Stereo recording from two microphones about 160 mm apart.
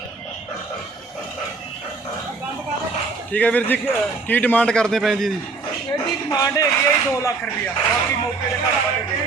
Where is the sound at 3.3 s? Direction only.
10° left (ahead or behind).